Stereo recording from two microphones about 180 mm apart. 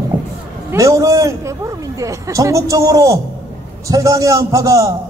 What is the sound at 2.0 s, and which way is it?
A man's voice, 15° right (ahead or behind).